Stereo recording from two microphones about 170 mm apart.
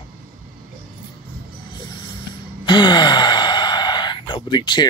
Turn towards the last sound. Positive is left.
turn(degrees=25)  # may be behind; listen again after turning